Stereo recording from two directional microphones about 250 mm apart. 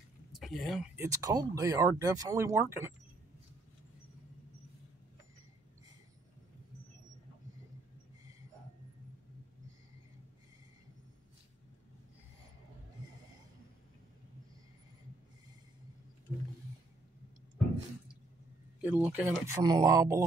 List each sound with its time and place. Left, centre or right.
0.4 s speech: centre
18.8 s speech: centre